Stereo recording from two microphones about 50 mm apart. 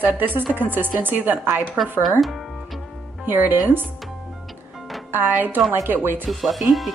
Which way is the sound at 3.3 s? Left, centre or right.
Right.